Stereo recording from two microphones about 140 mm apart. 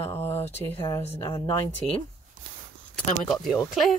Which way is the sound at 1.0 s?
45° left (ahead or behind).